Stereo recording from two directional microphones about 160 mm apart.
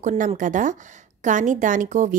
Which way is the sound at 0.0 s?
45° right (ahead or behind).